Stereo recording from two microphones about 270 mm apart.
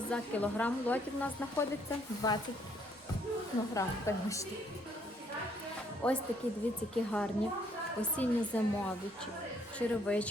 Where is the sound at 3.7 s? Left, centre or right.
Centre.